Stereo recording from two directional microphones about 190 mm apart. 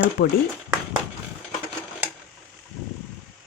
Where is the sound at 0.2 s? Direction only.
60° left (ahead or behind).